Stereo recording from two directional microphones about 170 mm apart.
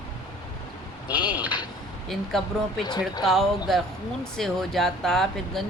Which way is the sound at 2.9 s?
25° left (ahead or behind).